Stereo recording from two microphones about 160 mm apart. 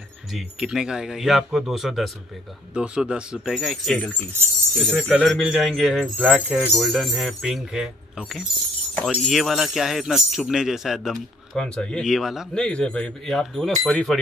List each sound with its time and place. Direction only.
0.3 s speech: centre (ahead or behind)